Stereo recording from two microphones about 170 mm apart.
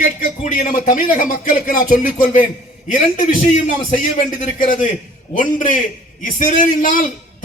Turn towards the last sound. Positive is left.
turn(degrees=50)  # may be behind; listen again after turning